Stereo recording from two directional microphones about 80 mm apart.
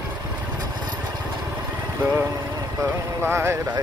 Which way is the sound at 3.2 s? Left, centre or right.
Right.